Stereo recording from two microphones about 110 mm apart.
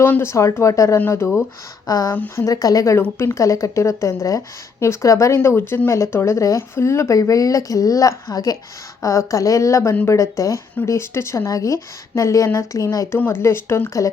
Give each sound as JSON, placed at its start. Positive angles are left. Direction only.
{"t": 0.0, "sound": "speech", "side_deg": 20}
{"t": 1.9, "sound": "speech", "side_deg": 35}
{"t": 2.1, "sound": "speech", "side_deg": 20}
{"t": 13.1, "sound": "speech", "side_deg": 20}